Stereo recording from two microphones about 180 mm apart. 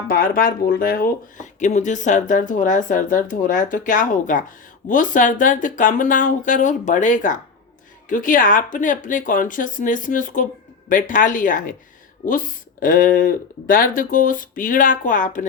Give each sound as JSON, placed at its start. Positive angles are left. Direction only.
{"t": 0.1, "sound": "speech", "side_deg": 50}